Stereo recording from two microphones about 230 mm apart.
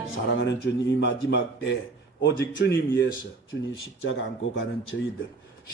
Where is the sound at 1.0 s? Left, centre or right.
Left.